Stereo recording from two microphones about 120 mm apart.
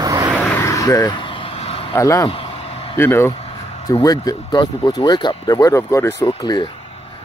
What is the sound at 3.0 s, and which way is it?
Speech, 20° left (ahead or behind).